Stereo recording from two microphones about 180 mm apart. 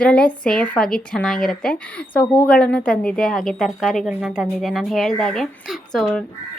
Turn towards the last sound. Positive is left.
turn(degrees=5)  # may be behind; listen again after turning